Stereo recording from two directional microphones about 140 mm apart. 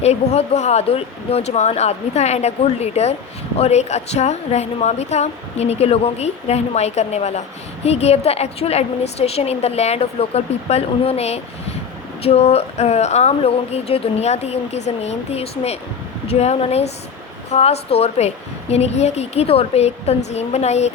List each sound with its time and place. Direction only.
0.0 s a woman's voice: 50° left (ahead or behind)